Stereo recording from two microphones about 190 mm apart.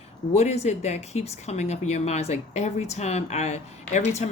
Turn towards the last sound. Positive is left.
turn(degrees=35)  # may be behind; listen again after turning